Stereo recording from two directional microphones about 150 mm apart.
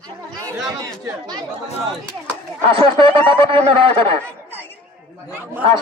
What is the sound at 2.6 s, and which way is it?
Speech, 35° right (ahead or behind).